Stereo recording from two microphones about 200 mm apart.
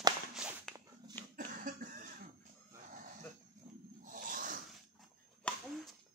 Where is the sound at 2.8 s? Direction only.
40° right (ahead or behind).